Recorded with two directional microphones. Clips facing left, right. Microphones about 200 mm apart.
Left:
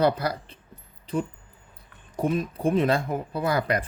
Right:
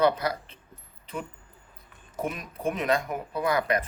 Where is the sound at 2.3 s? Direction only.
30° left (ahead or behind).